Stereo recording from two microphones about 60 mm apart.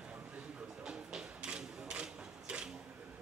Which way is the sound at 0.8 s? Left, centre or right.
Centre.